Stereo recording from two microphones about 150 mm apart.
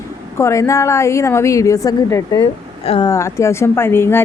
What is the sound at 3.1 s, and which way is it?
Speech, 20° left (ahead or behind).